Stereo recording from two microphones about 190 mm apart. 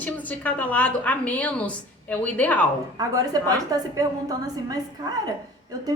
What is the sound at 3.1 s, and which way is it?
A woman's voice, 20° right (ahead or behind).